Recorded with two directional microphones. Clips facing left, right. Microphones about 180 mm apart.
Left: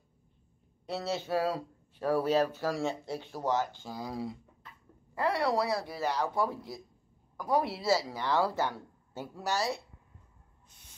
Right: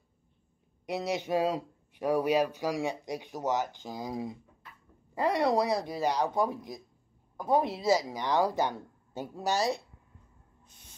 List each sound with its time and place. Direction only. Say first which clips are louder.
0.8 s speech: right 2 dB; 15° right (ahead or behind)